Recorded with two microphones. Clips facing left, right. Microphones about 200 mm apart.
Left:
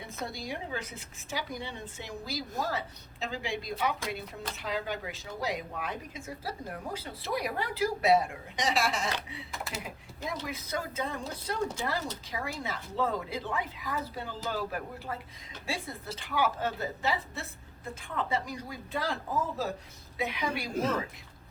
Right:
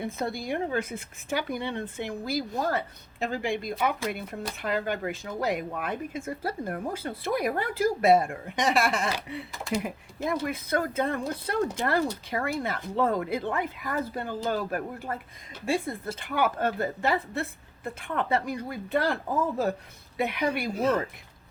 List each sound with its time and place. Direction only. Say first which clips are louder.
0.0 s a woman's voice: right 7 dB; 55° right (ahead or behind)
9.5 s speech: right 9 dB; 5° left (ahead or behind)
9.8 s a woman's voice: right 8 dB; 55° right (ahead or behind)